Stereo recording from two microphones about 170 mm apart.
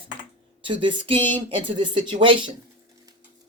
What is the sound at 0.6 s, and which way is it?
Speech, 30° right (ahead or behind).